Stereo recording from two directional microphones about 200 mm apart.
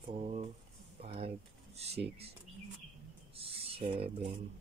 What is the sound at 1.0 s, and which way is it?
Typing, 30° right (ahead or behind).